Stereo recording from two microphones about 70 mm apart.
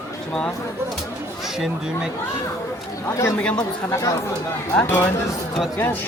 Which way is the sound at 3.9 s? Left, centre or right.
Left.